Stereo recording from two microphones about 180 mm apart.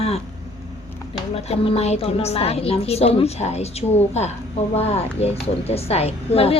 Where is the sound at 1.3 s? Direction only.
35° left (ahead or behind).